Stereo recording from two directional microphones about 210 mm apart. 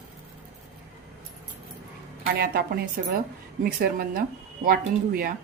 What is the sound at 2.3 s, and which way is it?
Speech, 45° right (ahead or behind).